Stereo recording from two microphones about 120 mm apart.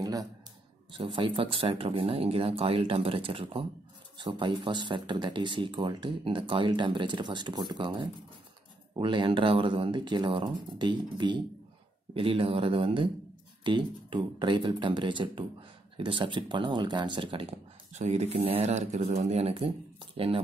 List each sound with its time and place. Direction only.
0.0 s speech: 30° right (ahead or behind)
0.9 s speech: 45° right (ahead or behind)
17.9 s speech: 70° right (ahead or behind); by 20.3 s 50° right (ahead or behind)